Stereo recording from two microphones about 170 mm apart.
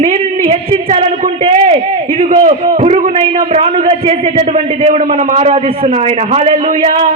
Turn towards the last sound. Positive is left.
turn(degrees=-45)  # may be behind; listen again after turning